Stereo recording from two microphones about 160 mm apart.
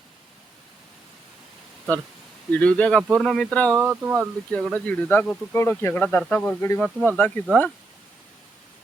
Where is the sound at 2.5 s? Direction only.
10° left (ahead or behind).